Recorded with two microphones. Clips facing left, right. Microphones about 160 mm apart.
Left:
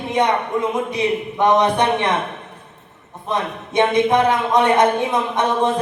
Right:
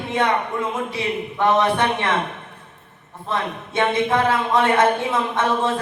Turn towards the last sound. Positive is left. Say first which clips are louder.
# left 3 dB
turn(degrees=20)  # may be behind; listen again after turning